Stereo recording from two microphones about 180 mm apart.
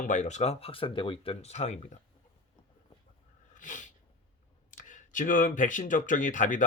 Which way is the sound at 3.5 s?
45° left (ahead or behind).